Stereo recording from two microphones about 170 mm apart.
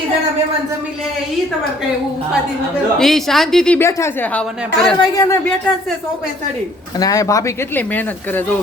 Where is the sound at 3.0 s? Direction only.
Centre (ahead or behind).